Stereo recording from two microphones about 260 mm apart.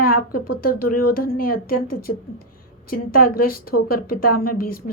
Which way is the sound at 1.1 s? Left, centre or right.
Left.